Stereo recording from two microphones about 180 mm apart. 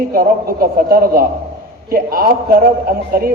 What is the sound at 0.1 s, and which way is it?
A man's voice, 55° right (ahead or behind).